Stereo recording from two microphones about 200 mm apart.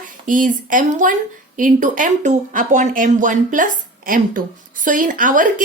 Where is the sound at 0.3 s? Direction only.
40° right (ahead or behind).